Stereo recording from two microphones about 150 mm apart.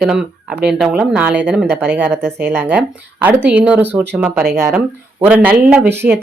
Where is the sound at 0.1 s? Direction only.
5° right (ahead or behind).